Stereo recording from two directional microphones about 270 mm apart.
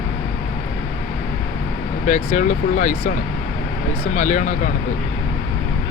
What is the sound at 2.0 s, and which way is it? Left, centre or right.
Speech, left.